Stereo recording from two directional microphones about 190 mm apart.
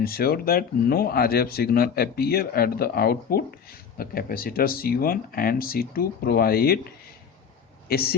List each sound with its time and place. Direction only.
0.0 s speech: 50° left (ahead or behind)
7.9 s speech: 55° left (ahead or behind)